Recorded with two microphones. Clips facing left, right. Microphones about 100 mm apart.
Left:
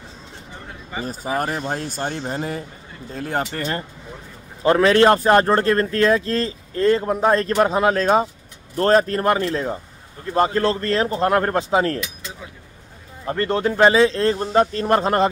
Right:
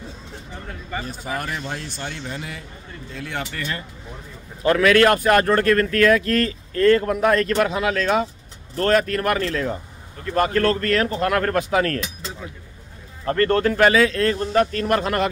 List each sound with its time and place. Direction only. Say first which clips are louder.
1.0 s speech: left 8 dB; 40° left (ahead or behind)
4.6 s speech: left 2 dB; 30° left (ahead or behind)
13.2 s speech: right 2 dB; 15° left (ahead or behind)